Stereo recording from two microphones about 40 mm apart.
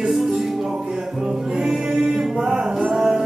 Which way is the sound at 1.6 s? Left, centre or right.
Centre.